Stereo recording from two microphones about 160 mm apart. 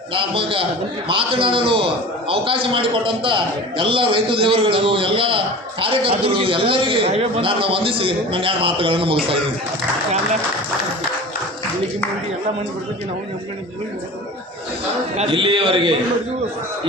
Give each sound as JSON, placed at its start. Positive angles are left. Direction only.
{"t": 0.1, "sound": "a man's voice", "side_deg": -35}
{"t": 15.1, "sound": "a man's voice", "side_deg": -40}